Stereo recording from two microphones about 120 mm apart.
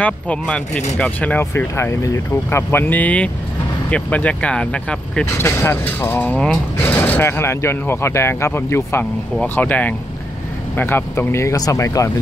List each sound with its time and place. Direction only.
0.0 s speech: 10° left (ahead or behind)
5.5 s speech: 20° left (ahead or behind)